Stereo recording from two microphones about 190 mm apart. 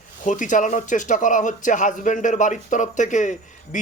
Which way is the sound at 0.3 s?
40° left (ahead or behind).